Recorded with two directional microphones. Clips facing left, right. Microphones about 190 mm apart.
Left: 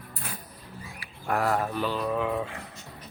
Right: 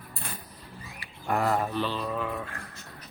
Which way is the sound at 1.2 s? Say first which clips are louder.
Even; centre (ahead or behind).